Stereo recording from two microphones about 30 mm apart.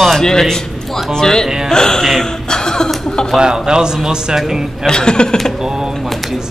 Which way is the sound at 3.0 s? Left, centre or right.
Left.